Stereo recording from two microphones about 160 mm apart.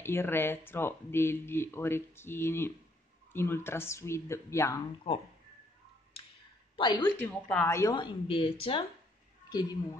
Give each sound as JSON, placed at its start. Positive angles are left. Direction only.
{"t": 0.0, "sound": "speech", "side_deg": 15}
{"t": 6.8, "sound": "a woman's voice", "side_deg": 25}
{"t": 7.2, "sound": "speech", "side_deg": 10}
{"t": 7.9, "sound": "speech", "side_deg": 30}
{"t": 9.5, "sound": "a woman's voice", "side_deg": 25}